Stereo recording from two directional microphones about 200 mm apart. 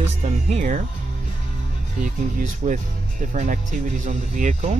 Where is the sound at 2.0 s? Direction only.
40° right (ahead or behind).